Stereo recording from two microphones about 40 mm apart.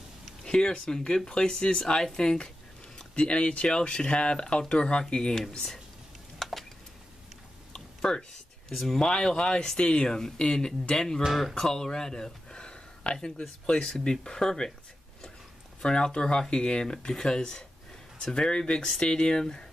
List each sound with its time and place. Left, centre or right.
0.4 s speech: centre
6.4 s a sound: centre
8.0 s a sound: centre
8.7 s speech: centre
9.0 s speech: centre
9.8 s speech: left
13.8 s speech: centre
15.8 s speech: left